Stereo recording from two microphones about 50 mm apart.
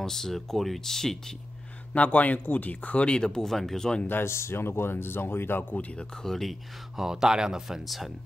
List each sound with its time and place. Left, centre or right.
0.0 s speech: centre
2.0 s speech: left; by 4.0 s centre
4.1 s speech: left
5.6 s speech: left
6.2 s speech: centre
7.0 s speech: centre